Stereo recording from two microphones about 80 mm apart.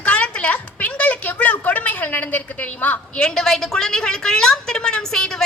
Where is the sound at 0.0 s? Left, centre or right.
Centre.